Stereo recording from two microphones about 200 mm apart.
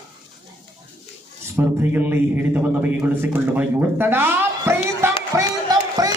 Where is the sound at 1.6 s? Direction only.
10° right (ahead or behind).